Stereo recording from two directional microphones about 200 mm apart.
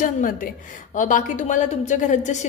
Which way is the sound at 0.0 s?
40° left (ahead or behind).